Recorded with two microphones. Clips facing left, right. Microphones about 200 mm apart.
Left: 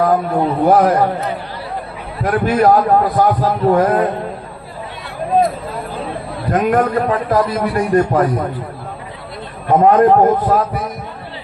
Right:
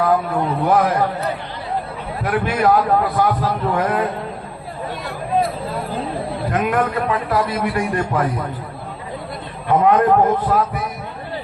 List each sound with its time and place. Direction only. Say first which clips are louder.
0.0 s a man's voice: left 3 dB; 40° left (ahead or behind)
2.2 s a man's voice: left 5 dB; 45° left (ahead or behind)
6.5 s a man's voice: left 6 dB; 45° left (ahead or behind)
9.8 s a man's voice: left 5 dB; 40° left (ahead or behind)